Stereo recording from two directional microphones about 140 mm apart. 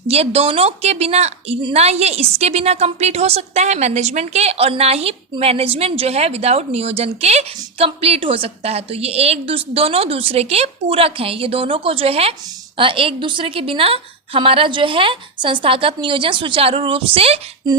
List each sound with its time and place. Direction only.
0.1 s a woman's voice: 45° right (ahead or behind)